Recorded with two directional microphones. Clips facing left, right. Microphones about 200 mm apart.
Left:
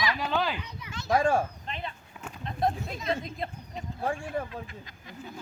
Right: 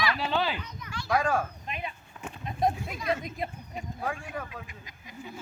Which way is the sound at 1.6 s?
10° right (ahead or behind).